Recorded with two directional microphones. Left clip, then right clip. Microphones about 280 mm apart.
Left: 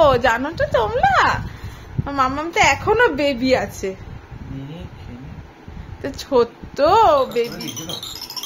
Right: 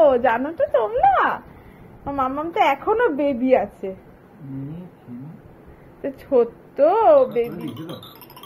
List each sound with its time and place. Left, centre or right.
0.0 s speech: centre
6.0 s speech: centre